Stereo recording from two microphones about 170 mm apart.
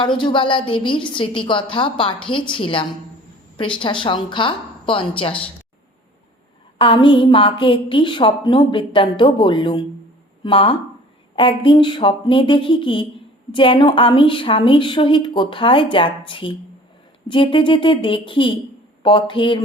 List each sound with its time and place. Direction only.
0.0 s a woman's voice: 30° left (ahead or behind)
6.7 s a woman's voice: 30° left (ahead or behind)